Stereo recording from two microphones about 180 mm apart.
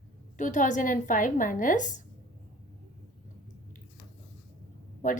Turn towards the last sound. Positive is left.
turn(degrees=45)  # may be behind; listen again after turning